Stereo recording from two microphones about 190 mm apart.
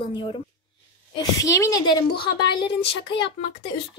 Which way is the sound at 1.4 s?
15° left (ahead or behind).